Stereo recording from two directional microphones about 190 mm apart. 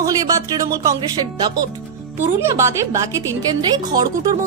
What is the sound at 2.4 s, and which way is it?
A woman's voice, 15° right (ahead or behind).